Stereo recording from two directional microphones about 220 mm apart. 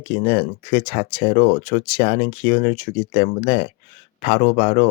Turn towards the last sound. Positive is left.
turn(degrees=30)  # may be behind; listen again after turning